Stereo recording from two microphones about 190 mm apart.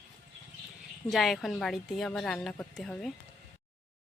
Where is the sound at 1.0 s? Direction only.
Centre (ahead or behind).